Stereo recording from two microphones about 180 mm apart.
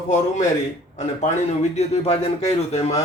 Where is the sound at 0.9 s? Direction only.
40° left (ahead or behind).